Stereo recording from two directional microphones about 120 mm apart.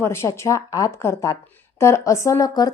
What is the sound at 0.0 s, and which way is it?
A woman's voice, 20° left (ahead or behind).